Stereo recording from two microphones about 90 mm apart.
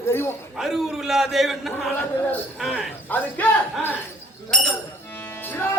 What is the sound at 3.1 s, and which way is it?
Speech, 20° left (ahead or behind).